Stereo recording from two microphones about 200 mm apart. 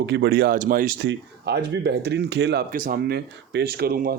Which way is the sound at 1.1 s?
55° right (ahead or behind).